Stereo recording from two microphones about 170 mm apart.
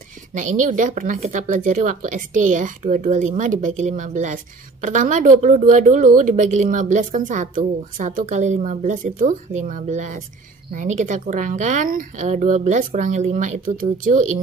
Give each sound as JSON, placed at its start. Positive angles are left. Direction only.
{"t": 0.3, "sound": "speech", "side_deg": -50}